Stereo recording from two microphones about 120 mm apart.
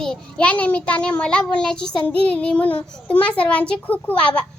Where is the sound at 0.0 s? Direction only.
10° left (ahead or behind).